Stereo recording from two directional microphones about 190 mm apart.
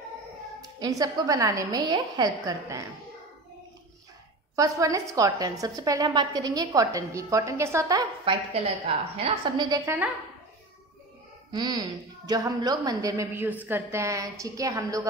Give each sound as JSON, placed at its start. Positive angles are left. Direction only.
{"t": 0.6, "sound": "a woman's voice", "side_deg": -20}
{"t": 4.6, "sound": "a woman's voice", "side_deg": -15}
{"t": 8.8, "sound": "a woman's voice", "side_deg": -30}
{"t": 11.5, "sound": "a woman's voice", "side_deg": -20}